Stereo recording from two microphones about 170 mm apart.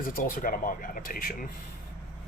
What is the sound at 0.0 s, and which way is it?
Speech, 55° left (ahead or behind).